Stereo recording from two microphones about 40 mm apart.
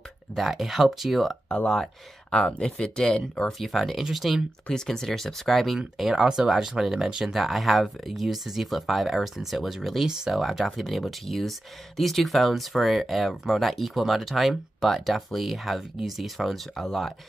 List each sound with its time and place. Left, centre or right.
0.4 s speech: centre
2.6 s speech: centre
3.5 s speech: centre
4.8 s speech: centre
7.3 s speech: centre